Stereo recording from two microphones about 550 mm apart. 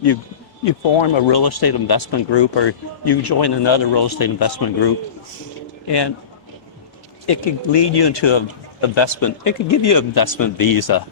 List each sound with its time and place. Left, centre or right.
0.6 s speech: left
5.9 s speech: left
7.3 s speech: left
9.2 s speech: left